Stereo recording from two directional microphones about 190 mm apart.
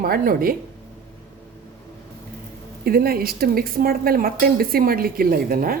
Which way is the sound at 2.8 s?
55° right (ahead or behind).